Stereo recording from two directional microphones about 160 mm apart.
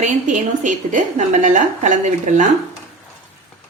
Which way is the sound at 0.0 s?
50° right (ahead or behind).